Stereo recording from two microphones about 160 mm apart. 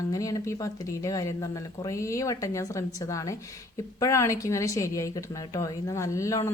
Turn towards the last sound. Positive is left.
turn(degrees=20)  # may be behind; listen again after turning